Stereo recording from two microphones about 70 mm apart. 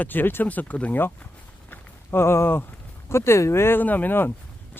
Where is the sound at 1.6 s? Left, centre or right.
Left.